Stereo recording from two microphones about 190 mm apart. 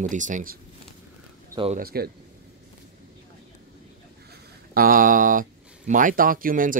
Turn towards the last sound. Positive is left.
turn(degrees=-45)  # may be behind; listen again after turning